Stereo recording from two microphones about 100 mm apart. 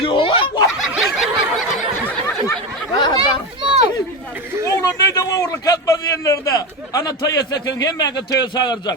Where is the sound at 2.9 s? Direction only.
40° left (ahead or behind).